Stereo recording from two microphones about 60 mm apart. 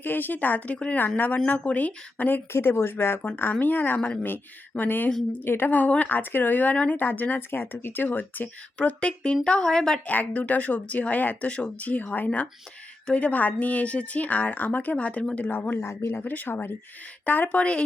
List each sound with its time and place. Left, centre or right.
0.0 s speech: left; by 10.0 s centre
10.1 s speech: left
15.4 s speech: left
16.2 s speech: left